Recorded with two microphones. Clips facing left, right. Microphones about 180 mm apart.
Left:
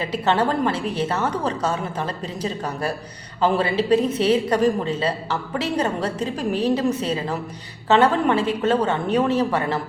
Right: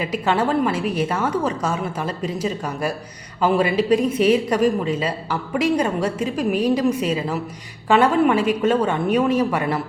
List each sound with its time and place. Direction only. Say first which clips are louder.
0.0 s speech: even; 10° right (ahead or behind)